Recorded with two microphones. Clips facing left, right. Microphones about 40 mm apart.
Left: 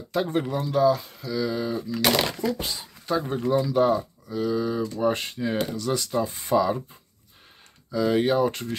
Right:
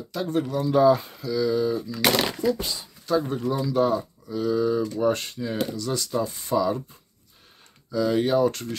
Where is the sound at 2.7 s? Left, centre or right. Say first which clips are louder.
Right 2 dB; centre.